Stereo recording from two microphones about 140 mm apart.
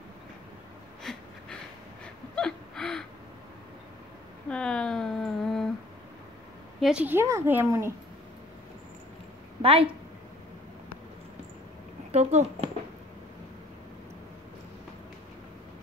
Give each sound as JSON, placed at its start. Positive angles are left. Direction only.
{"t": 1.1, "sound": "wheeze", "side_deg": 5}
{"t": 2.3, "sound": "gasp", "side_deg": 5}
{"t": 4.5, "sound": "a sound", "side_deg": 5}
{"t": 6.8, "sound": "a woman's voice", "side_deg": -5}
{"t": 9.6, "sound": "speech", "side_deg": -40}
{"t": 12.1, "sound": "speech", "side_deg": -50}